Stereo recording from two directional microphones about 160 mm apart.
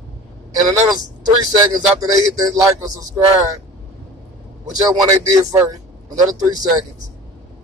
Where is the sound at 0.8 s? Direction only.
25° right (ahead or behind).